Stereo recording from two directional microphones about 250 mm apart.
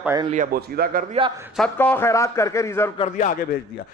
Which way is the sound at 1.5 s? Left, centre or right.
Centre.